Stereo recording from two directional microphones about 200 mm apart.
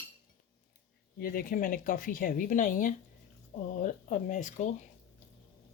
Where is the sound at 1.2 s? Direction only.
45° left (ahead or behind).